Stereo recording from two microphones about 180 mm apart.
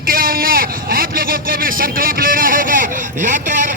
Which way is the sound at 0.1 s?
55° right (ahead or behind).